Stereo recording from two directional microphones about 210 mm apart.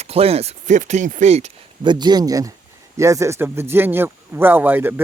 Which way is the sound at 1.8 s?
20° right (ahead or behind).